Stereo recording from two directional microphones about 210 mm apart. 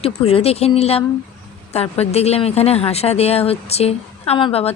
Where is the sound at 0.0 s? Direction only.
25° left (ahead or behind).